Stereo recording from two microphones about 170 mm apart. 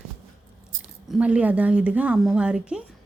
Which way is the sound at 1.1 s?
5° right (ahead or behind).